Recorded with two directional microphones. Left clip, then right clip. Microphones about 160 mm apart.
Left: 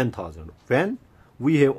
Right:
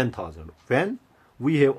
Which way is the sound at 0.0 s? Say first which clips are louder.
Even; 20° left (ahead or behind).